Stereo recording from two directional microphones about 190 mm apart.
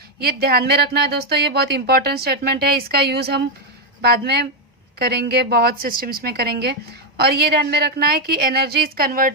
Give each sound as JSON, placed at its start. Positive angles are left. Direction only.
{"t": 0.2, "sound": "speech", "side_deg": -55}